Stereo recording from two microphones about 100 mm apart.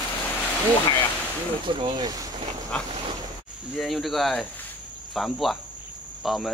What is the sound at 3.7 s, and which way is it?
Speech, centre (ahead or behind).